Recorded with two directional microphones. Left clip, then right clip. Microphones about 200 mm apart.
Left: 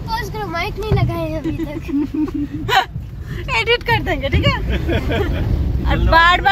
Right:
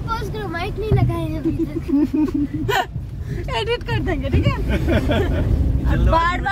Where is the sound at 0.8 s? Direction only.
40° left (ahead or behind).